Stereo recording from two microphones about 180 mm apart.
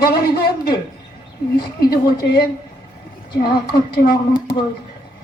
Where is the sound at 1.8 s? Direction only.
55° left (ahead or behind).